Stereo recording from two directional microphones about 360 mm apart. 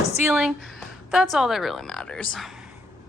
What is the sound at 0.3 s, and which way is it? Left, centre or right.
A woman's voice, centre.